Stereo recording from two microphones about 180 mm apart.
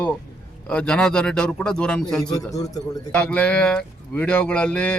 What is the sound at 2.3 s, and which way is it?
Speech, 20° left (ahead or behind).